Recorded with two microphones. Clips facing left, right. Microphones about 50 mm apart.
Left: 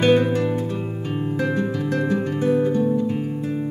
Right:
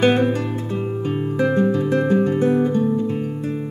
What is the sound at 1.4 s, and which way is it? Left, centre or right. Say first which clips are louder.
Guitar: right 7 dB; right.